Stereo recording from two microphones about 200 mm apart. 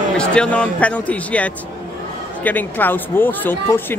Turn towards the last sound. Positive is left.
turn(degrees=10)  # may be behind; listen again after turning